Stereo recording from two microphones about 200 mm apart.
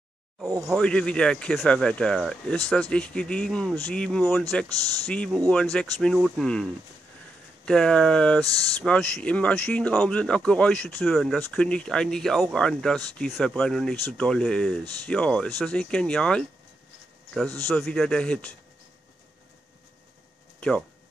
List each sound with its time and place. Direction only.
0.7 s speech: 5° left (ahead or behind)
8.5 s speech: 15° right (ahead or behind)
8.8 s speech: 5° left (ahead or behind)
17.6 s speech: centre (ahead or behind)